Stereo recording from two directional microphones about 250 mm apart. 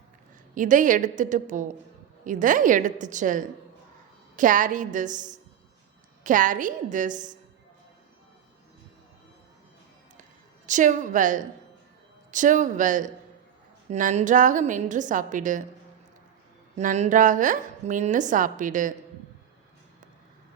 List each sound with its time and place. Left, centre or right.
0.5 s a woman's voice: right
10.7 s a woman's voice: right
16.7 s a woman's voice: right